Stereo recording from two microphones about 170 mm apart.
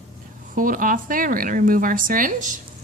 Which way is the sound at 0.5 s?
55° right (ahead or behind).